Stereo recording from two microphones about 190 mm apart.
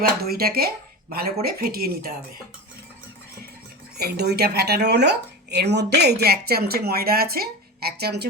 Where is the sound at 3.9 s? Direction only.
55° right (ahead or behind).